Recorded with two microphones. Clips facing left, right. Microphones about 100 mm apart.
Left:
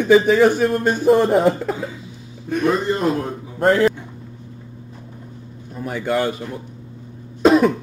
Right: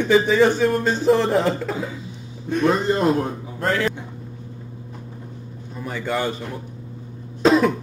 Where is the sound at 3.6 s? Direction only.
35° left (ahead or behind).